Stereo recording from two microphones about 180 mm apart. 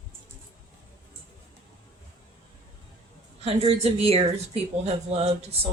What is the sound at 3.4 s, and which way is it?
Speech, 35° right (ahead or behind).